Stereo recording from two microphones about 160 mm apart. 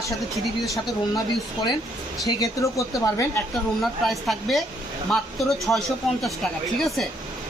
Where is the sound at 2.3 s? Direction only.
20° left (ahead or behind).